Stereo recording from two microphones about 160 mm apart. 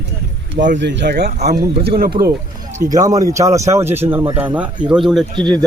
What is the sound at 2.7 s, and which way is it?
Speech, 20° right (ahead or behind).